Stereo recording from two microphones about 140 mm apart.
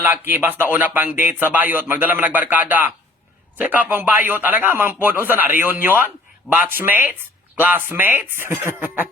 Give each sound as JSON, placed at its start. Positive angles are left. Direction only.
{"t": 0.0, "sound": "speech", "side_deg": -15}